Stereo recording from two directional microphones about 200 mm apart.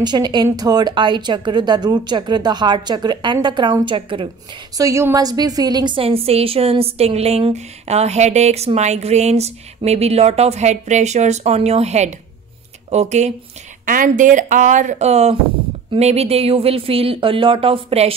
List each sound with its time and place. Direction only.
0.0 s a woman's voice: 20° right (ahead or behind)